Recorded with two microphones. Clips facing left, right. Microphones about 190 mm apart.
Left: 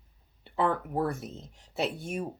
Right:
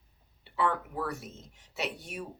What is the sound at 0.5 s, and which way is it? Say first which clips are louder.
Speech: left 3 dB; 45° left (ahead or behind).